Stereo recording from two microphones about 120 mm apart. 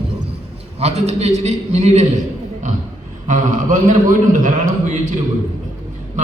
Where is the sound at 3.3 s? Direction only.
90° right.